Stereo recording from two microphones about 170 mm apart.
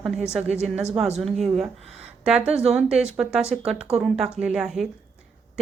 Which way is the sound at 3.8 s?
35° right (ahead or behind).